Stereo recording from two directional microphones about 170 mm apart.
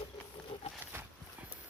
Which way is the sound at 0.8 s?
15° right (ahead or behind).